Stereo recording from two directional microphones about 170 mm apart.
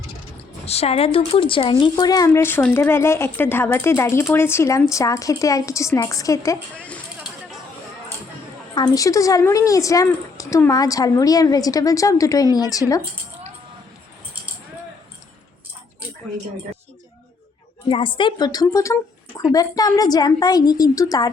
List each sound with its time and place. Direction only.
0.6 s a woman's voice: 35° left (ahead or behind); by 6.6 s 20° left (ahead or behind)
6.7 s a sound: 10° left (ahead or behind)
8.7 s a woman's voice: 25° left (ahead or behind)
17.8 s a woman's voice: 30° left (ahead or behind)